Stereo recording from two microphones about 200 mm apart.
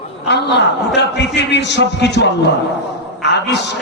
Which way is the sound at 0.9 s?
60° left (ahead or behind).